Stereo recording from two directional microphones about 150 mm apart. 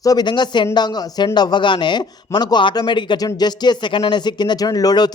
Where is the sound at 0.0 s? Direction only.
25° left (ahead or behind).